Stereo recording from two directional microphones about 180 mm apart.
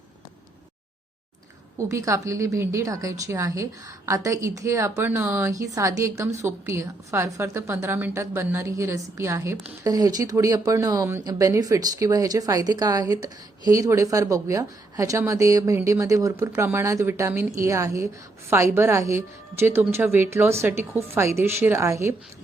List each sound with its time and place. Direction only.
1.9 s a woman's voice: 15° right (ahead or behind)